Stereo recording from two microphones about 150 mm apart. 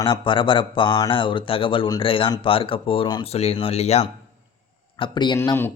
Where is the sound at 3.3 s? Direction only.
45° left (ahead or behind).